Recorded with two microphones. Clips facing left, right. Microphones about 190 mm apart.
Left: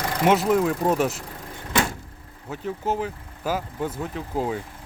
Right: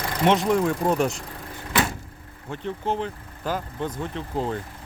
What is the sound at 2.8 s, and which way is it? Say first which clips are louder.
Speech: left 1 dB; 5° left (ahead or behind).